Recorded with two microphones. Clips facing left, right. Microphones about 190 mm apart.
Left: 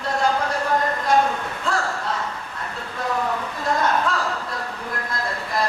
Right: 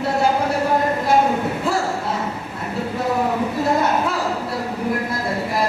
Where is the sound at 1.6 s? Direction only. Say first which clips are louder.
Even; 5° right (ahead or behind).